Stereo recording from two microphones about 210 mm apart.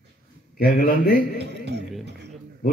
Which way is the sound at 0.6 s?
45° left (ahead or behind).